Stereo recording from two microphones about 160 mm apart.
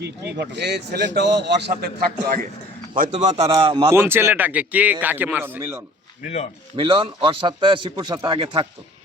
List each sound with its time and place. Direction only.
0.0 s a man's voice: 90° right
2.9 s a man's voice: 50° right (ahead or behind); by 3.8 s 35° right (ahead or behind)
3.8 s speech: 15° right (ahead or behind)
6.2 s speech: 45° left (ahead or behind)
6.7 s a man's voice: 35° right (ahead or behind)